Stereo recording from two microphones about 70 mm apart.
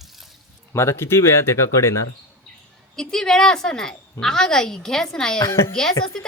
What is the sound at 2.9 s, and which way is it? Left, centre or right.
A woman's voice, centre.